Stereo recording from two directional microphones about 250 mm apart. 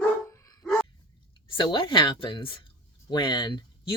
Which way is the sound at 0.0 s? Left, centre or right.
Centre.